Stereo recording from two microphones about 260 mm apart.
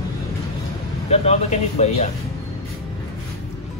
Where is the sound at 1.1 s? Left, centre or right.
Left.